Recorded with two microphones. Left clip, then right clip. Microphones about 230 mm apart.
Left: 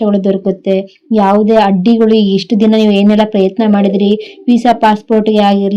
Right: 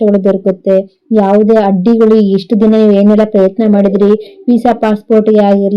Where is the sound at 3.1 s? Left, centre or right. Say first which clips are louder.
Right 2 dB; left.